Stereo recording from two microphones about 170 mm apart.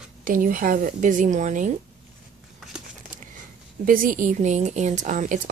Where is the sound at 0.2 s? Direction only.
55° right (ahead or behind).